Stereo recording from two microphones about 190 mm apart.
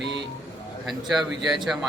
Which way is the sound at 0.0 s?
65° right (ahead or behind).